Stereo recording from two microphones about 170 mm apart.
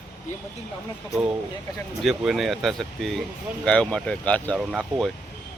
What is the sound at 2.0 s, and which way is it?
Speech, centre (ahead or behind).